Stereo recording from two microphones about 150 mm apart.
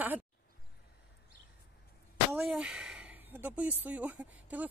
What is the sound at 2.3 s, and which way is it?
Speech, 5° right (ahead or behind).